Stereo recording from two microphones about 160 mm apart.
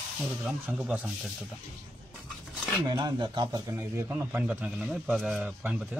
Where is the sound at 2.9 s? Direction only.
25° right (ahead or behind).